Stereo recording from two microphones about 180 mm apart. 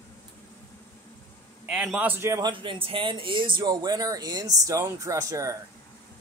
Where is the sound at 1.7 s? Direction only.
5° right (ahead or behind).